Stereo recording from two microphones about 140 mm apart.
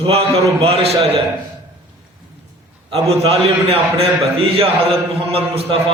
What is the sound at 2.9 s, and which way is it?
A man's voice, 45° right (ahead or behind).